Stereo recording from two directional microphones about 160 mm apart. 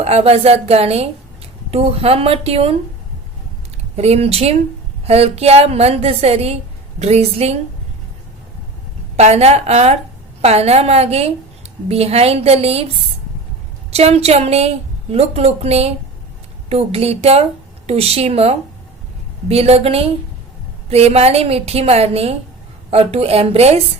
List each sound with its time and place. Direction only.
0.0 s a woman's voice: 40° right (ahead or behind)
3.9 s a woman's voice: 40° right (ahead or behind)
9.1 s a woman's voice: 40° right (ahead or behind)
13.9 s a woman's voice: 40° right (ahead or behind)